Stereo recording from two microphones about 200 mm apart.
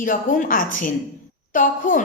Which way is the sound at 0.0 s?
40° left (ahead or behind).